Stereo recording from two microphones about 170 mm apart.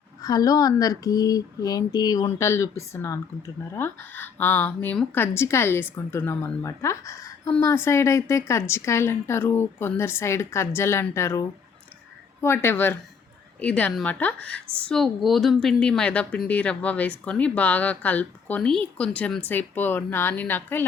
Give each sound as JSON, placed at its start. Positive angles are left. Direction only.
{"t": 0.2, "sound": "speech", "side_deg": 20}